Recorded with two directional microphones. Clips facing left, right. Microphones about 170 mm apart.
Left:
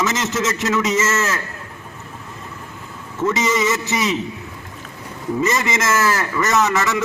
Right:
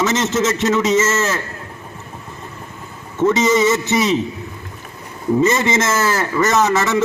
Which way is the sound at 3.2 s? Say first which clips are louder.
Right 5 dB; 30° right (ahead or behind).